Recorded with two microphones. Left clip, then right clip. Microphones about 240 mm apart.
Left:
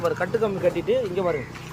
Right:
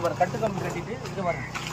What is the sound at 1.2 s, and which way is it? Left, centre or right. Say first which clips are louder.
Speech: left 4 dB; centre.